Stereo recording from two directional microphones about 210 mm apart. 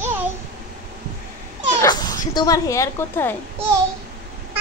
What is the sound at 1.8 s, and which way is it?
Speech, 15° left (ahead or behind).